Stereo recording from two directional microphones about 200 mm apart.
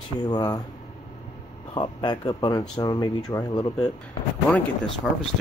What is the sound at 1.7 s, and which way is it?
Speech, 20° left (ahead or behind).